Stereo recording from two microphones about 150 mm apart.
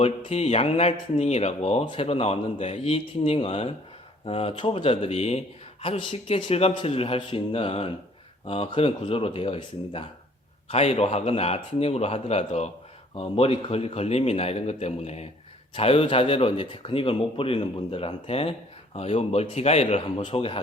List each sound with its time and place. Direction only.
0.0 s speech: 40° left (ahead or behind)